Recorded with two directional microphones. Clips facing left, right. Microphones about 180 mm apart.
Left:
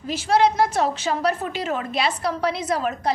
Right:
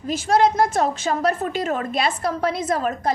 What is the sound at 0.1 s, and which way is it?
A woman's voice, 50° right (ahead or behind).